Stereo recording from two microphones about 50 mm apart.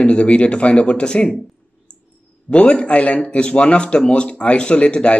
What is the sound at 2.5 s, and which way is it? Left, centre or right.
Speech, left.